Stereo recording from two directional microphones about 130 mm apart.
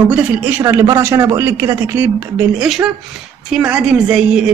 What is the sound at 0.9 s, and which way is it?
A woman's voice, 20° right (ahead or behind).